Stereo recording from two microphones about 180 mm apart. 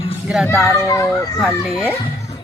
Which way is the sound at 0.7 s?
15° left (ahead or behind).